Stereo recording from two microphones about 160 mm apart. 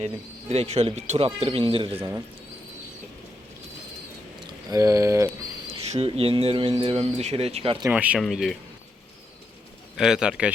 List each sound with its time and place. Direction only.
0.0 s speech: 40° right (ahead or behind)
2.0 s speech: 15° right (ahead or behind)
4.7 s speech: 20° right (ahead or behind)
5.6 s speech: 40° right (ahead or behind)
7.9 s speech: 10° right (ahead or behind)
10.0 s speech: 5° right (ahead or behind)